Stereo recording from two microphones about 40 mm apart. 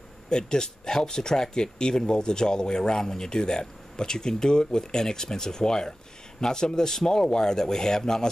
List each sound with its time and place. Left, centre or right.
0.3 s speech: centre